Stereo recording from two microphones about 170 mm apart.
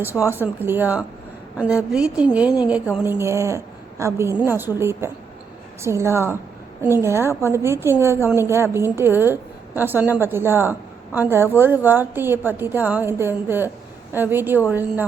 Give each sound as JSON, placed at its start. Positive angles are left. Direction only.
{"t": 0.3, "sound": "a woman's voice", "side_deg": -10}